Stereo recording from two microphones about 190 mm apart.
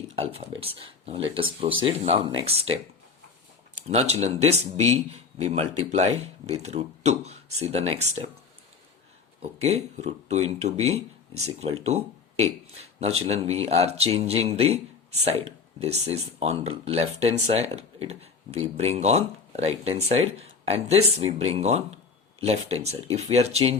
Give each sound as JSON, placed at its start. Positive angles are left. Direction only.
{"t": 0.2, "sound": "speech", "side_deg": -30}
{"t": 3.8, "sound": "speech", "side_deg": -35}
{"t": 9.4, "sound": "speech", "side_deg": -35}